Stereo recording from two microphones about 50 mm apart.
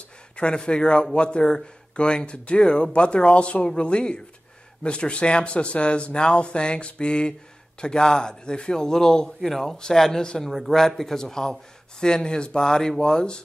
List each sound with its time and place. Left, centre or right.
0.4 s a man's voice: centre